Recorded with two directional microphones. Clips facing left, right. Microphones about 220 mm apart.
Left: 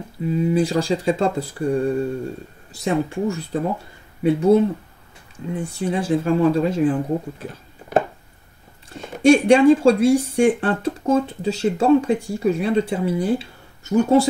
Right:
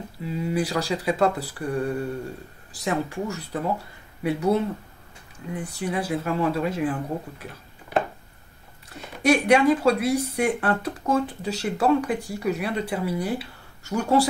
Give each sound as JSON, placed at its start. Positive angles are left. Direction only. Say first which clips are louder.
{"t": 0.5, "sound": "speech", "louder": "left 5 dB", "side_deg": 25}
{"t": 5.5, "sound": "speech", "louder": "left 5 dB", "side_deg": 25}
{"t": 8.8, "sound": "speech", "louder": "left 7 dB", "side_deg": 25}